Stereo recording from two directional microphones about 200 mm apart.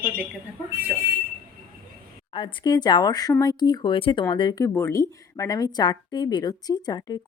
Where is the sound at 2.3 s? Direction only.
20° left (ahead or behind).